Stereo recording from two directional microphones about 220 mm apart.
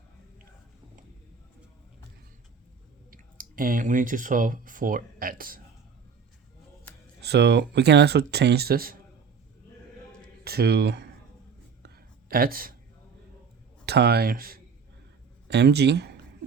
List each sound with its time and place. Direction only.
3.1 s speech: 40° right (ahead or behind)
7.2 s speech: 50° right (ahead or behind)
10.4 s speech: 45° right (ahead or behind)
11.8 s whispering: 45° right (ahead or behind)
13.8 s speech: 50° right (ahead or behind)